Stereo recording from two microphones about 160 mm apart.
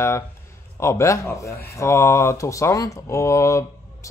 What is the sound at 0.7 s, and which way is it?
Speech, 20° left (ahead or behind).